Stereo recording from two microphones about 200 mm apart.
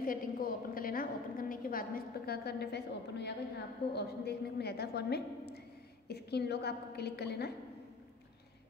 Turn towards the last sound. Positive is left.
turn(degrees=55)  # may be behind; listen again after turning